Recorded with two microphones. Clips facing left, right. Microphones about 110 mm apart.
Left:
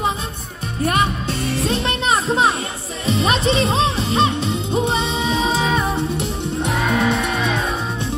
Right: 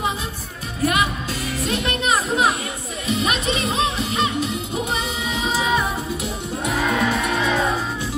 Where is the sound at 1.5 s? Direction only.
30° left (ahead or behind).